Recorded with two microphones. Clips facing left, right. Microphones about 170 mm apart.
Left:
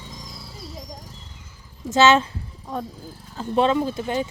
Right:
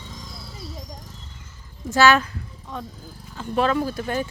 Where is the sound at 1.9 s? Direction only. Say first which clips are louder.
Left 1 dB; 20° left (ahead or behind).